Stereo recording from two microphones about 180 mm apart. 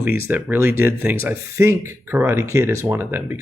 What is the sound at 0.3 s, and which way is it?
Speech, 10° right (ahead or behind).